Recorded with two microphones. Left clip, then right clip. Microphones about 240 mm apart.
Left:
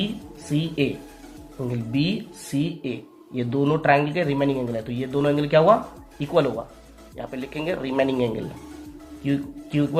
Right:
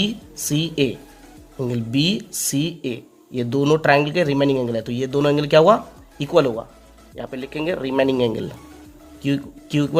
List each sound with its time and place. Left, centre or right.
0.5 s speech: right